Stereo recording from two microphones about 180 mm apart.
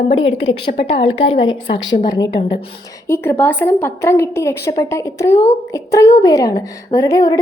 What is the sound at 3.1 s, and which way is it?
A woman's voice, 10° left (ahead or behind).